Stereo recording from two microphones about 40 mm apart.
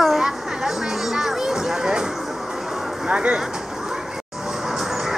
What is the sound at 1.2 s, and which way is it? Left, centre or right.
Music, centre.